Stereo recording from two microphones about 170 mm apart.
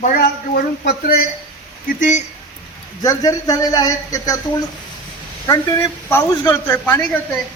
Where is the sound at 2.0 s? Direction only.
45° left (ahead or behind).